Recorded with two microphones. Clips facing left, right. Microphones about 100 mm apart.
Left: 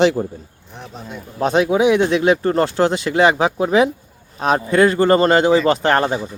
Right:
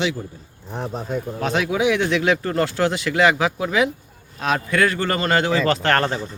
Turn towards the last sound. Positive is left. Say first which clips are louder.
# left 3 dB
turn(degrees=15)  # may be behind; listen again after turning